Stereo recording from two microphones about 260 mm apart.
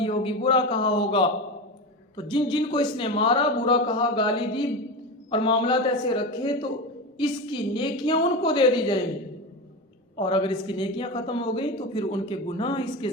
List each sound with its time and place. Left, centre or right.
0.0 s a woman's voice: left
10.2 s speech: centre